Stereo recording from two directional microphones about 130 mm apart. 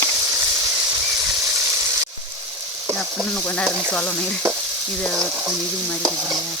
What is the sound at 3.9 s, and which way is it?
Speech, 10° left (ahead or behind).